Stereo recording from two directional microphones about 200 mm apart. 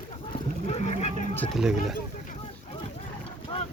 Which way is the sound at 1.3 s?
5° left (ahead or behind).